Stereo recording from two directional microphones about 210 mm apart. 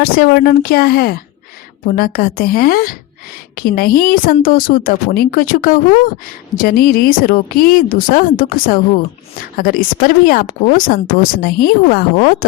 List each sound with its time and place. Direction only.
0.0 s speech: 45° left (ahead or behind)